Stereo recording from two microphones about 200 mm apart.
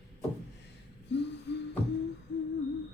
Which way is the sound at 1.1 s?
60° left (ahead or behind).